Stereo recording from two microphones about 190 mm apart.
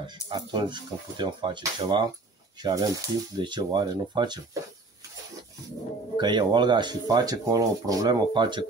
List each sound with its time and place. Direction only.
0.0 s speech: 25° right (ahead or behind)
6.1 s speech: 25° right (ahead or behind)